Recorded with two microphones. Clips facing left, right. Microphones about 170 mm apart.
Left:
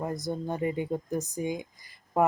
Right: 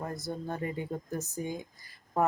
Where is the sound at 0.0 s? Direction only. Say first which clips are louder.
Left 4 dB; 15° left (ahead or behind).